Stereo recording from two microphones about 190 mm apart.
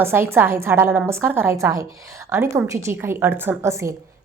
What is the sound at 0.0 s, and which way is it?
A woman's voice, 10° right (ahead or behind).